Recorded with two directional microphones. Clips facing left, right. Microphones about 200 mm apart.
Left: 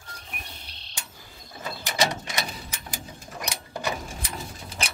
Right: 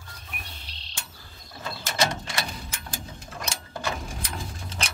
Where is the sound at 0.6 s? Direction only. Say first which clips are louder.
Even; 55° left (ahead or behind).